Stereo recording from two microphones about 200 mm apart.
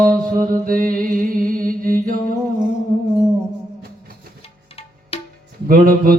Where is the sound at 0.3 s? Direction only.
45° right (ahead or behind).